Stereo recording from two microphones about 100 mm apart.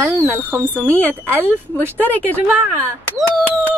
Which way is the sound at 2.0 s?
15° left (ahead or behind).